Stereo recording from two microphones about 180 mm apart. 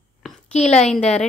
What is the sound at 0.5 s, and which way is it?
Speech, 35° left (ahead or behind).